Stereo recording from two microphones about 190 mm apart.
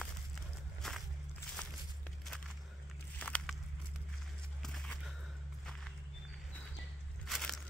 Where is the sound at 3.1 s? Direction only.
5° left (ahead or behind).